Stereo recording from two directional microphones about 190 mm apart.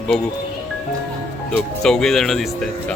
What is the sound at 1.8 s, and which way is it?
Speech, 5° left (ahead or behind).